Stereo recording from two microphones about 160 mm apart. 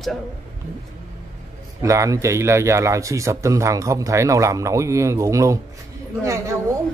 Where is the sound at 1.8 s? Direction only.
20° right (ahead or behind).